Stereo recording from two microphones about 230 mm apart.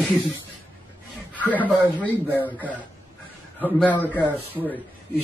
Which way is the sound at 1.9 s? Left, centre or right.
Centre.